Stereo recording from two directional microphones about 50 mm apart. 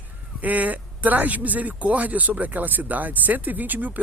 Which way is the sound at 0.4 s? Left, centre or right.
Right.